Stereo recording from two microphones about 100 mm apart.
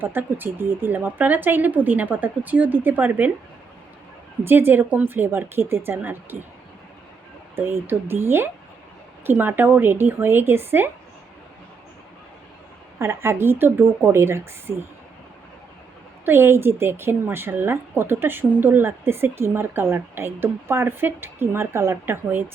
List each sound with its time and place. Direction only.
0.0 s a woman's voice: 20° right (ahead or behind)
4.4 s a woman's voice: 20° right (ahead or behind)
7.5 s a woman's voice: 20° right (ahead or behind)
13.0 s a woman's voice: 25° right (ahead or behind)
16.2 s a woman's voice: 25° right (ahead or behind)